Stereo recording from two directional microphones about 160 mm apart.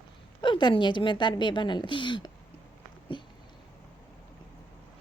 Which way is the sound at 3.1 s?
30° left (ahead or behind).